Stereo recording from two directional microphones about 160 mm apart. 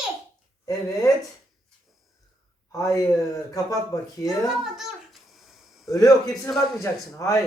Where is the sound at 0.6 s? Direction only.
20° left (ahead or behind).